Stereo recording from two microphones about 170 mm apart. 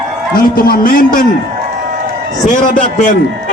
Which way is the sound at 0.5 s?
60° left (ahead or behind).